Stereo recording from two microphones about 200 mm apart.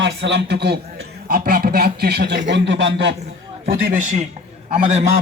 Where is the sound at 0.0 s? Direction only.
60° right (ahead or behind).